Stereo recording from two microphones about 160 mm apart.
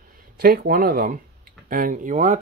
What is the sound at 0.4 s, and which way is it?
Speech, 65° right (ahead or behind).